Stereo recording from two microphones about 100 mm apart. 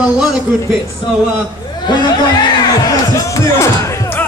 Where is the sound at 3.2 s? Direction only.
30° left (ahead or behind).